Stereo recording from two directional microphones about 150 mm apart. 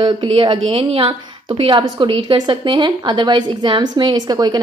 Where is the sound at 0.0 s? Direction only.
35° right (ahead or behind).